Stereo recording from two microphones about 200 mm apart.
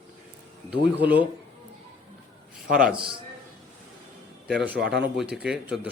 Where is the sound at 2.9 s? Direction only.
25° right (ahead or behind).